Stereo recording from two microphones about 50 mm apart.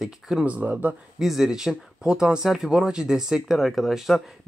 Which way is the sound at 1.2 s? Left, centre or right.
Centre.